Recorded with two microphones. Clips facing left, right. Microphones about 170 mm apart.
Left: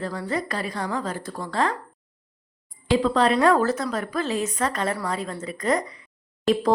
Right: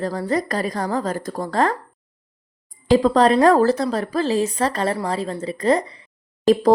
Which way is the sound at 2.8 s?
40° right (ahead or behind).